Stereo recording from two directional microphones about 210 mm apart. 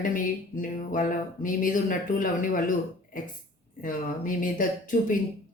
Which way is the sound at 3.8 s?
40° left (ahead or behind).